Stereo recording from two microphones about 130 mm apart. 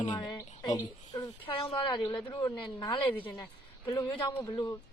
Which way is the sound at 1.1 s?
45° left (ahead or behind).